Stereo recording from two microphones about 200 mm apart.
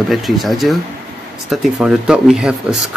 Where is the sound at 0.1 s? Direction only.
Centre (ahead or behind).